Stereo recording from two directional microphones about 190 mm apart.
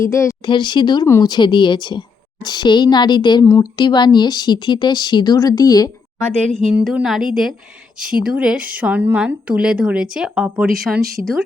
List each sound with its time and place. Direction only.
0.0 s speech: 15° left (ahead or behind)
6.7 s a woman's voice: 5° right (ahead or behind)